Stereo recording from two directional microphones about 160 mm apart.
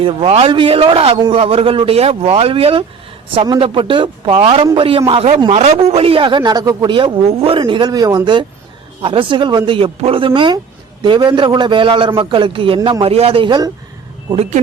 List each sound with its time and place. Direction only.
0.0 s a man's voice: 35° right (ahead or behind)